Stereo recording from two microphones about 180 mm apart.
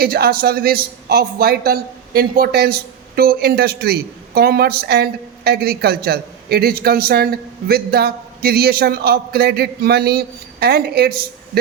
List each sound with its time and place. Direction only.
0.0 s a man's voice: 60° right (ahead or behind)